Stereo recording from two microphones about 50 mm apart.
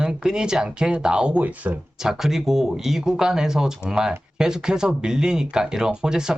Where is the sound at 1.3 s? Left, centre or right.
Right.